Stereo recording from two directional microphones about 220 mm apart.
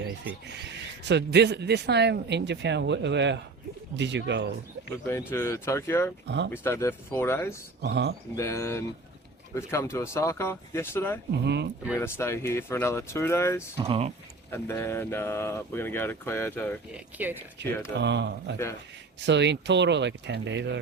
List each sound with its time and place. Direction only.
1.0 s speech: 50° right (ahead or behind)
5.3 s speech: 10° left (ahead or behind)
6.2 s speech: 55° right (ahead or behind)
6.5 s speech: 10° left (ahead or behind)
7.8 s speech: 50° right (ahead or behind)
8.4 s speech: 15° left (ahead or behind)
11.4 s speech: 50° right (ahead or behind)
11.9 s speech: 10° left (ahead or behind)
13.7 s speech: 25° right (ahead or behind)
14.5 s speech: 10° left (ahead or behind)
16.9 s speech: 10° right (ahead or behind)
17.6 s speech: 50° right (ahead or behind)